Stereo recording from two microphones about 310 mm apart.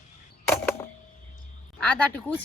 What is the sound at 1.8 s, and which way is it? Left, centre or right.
Speech, centre.